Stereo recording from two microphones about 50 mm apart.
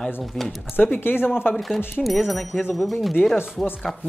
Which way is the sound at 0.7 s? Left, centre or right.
Left.